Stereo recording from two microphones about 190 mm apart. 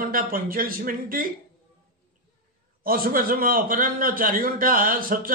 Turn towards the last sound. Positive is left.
turn(degrees=-50)  # may be behind; listen again after turning